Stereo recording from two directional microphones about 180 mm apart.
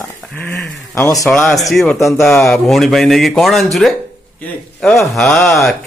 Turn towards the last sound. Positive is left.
turn(degrees=0)  # may be behind; listen again after turning